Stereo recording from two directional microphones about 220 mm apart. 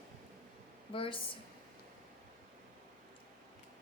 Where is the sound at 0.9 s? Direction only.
25° left (ahead or behind).